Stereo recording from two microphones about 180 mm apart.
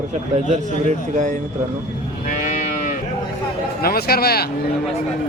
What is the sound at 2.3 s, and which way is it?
Livestock, 45° left (ahead or behind).